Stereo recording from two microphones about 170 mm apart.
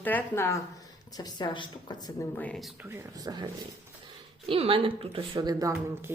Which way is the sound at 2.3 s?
5° left (ahead or behind).